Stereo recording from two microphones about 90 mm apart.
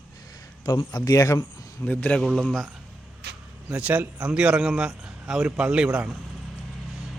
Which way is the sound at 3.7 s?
15° right (ahead or behind).